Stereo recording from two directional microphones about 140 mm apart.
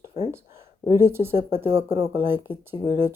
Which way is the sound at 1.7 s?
40° right (ahead or behind).